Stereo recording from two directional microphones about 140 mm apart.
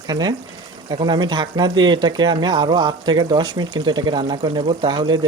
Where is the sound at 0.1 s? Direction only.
30° right (ahead or behind).